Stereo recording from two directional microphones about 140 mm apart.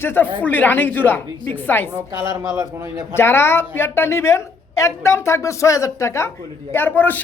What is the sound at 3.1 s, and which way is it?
A woman's voice, 15° left (ahead or behind).